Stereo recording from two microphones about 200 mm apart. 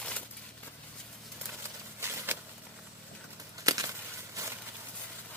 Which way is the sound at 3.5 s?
15° right (ahead or behind).